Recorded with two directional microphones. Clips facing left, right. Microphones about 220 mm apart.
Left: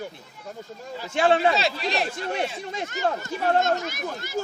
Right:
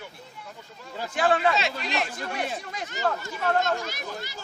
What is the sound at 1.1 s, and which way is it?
A man's voice, 25° left (ahead or behind).